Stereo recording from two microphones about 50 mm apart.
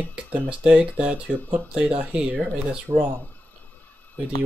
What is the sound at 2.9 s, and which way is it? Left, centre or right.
Speech, right.